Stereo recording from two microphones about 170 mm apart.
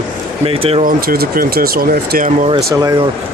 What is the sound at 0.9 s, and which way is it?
Speech, 60° right (ahead or behind).